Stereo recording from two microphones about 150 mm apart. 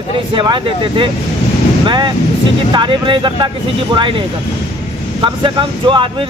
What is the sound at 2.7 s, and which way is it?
Speech, 30° right (ahead or behind).